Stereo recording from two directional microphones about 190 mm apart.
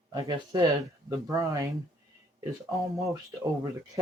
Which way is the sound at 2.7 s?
15° right (ahead or behind).